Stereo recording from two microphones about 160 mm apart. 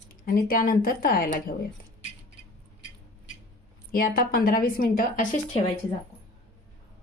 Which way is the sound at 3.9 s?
65° left (ahead or behind).